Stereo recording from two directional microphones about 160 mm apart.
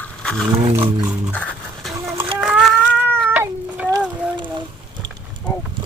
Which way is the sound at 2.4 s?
5° right (ahead or behind).